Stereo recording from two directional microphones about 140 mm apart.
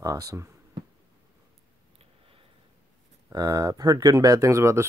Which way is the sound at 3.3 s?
25° right (ahead or behind).